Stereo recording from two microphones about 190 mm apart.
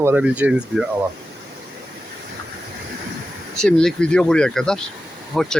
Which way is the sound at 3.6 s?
5° left (ahead or behind).